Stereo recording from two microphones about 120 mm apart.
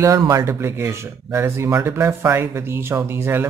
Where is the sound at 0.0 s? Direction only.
30° right (ahead or behind).